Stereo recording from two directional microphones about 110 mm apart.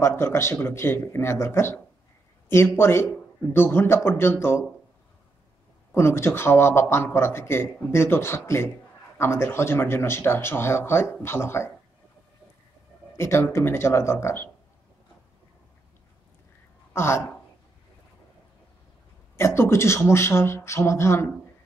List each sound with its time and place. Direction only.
0.0 s a man's voice: 25° left (ahead or behind)
5.9 s a man's voice: 25° left (ahead or behind)
13.1 s a man's voice: 25° left (ahead or behind)
16.9 s speech: 25° left (ahead or behind)
19.3 s a man's voice: 25° left (ahead or behind)